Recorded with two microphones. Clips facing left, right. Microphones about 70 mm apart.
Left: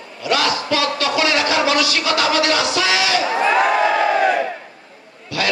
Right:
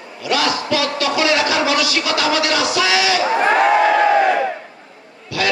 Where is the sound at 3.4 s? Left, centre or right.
Right.